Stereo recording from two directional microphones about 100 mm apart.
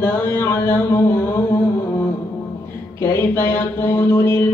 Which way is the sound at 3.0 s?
25° left (ahead or behind).